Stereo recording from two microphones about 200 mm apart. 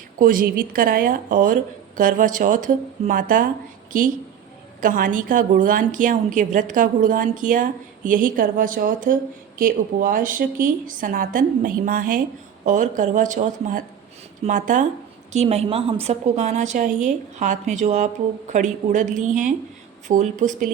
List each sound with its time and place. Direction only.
0.2 s a woman's voice: 45° right (ahead or behind)